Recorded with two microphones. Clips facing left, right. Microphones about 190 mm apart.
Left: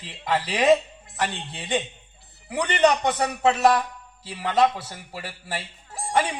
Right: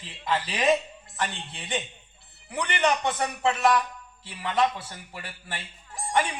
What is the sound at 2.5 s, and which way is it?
A man's voice, 35° left (ahead or behind).